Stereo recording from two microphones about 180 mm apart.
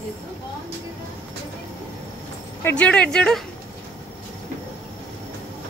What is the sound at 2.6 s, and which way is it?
Speech, 5° left (ahead or behind).